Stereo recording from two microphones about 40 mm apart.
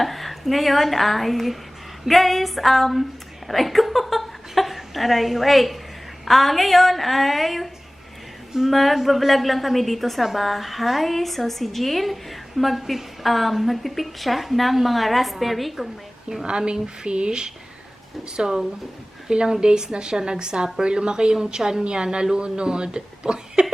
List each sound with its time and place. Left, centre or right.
0.0 s a woman's voice: centre
16.5 s a woman's voice: right